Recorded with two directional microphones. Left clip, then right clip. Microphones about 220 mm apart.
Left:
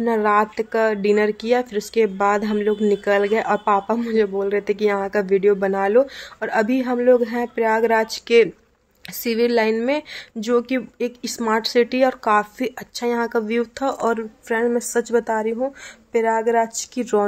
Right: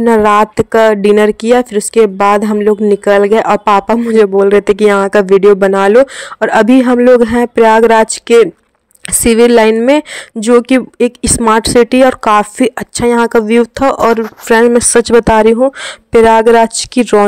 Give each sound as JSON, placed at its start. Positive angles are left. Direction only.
{"t": 0.0, "sound": "a woman's voice", "side_deg": -40}